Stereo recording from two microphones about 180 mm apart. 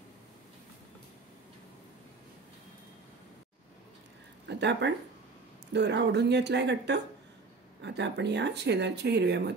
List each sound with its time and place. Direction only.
4.5 s speech: 75° right (ahead or behind)